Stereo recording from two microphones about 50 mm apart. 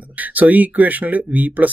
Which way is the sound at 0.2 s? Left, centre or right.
Right.